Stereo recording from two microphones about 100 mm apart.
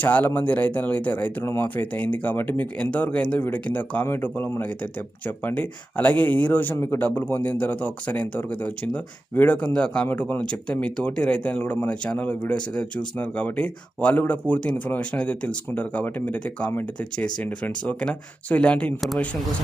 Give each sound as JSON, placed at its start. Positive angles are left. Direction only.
{"t": 0.0, "sound": "speech", "side_deg": 15}